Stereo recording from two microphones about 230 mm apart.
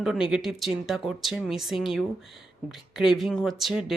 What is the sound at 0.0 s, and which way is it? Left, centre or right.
Speech, centre.